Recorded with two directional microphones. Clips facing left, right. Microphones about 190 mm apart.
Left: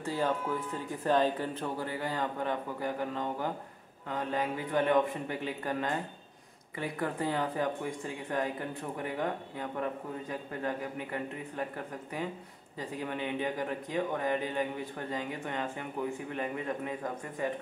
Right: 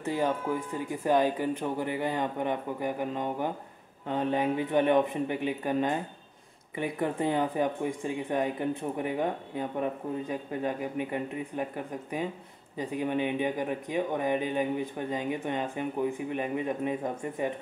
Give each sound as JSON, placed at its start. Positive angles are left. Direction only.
{"t": 0.0, "sound": "speech", "side_deg": -15}